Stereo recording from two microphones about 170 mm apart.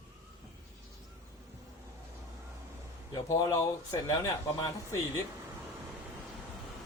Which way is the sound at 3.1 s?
20° left (ahead or behind).